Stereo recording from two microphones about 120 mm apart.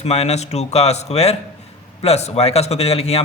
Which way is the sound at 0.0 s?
60° left (ahead or behind).